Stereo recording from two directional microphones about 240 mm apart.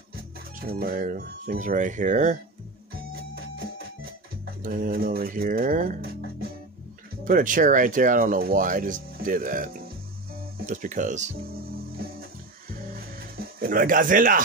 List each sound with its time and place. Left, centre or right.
0.1 s speech: right
3.3 s music: right
4.6 s speech: right
7.2 s speech: right
10.7 s speech: right
13.6 s speech: right